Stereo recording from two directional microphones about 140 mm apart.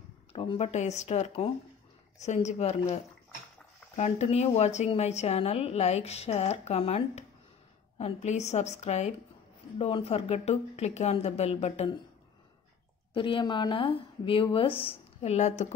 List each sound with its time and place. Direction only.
0.3 s a woman's voice: 40° left (ahead or behind)
13.1 s speech: 35° left (ahead or behind); by 15.7 s 55° left (ahead or behind)